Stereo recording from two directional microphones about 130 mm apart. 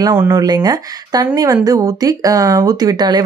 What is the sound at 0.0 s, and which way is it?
Speech, 20° right (ahead or behind).